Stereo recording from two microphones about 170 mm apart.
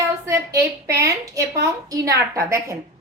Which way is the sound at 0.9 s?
20° right (ahead or behind).